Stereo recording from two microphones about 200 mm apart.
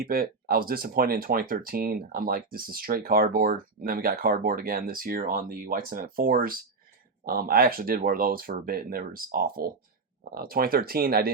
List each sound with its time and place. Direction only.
0.0 s speech: 50° right (ahead or behind)